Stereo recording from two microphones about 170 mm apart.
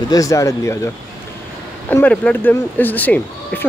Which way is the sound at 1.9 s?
10° left (ahead or behind).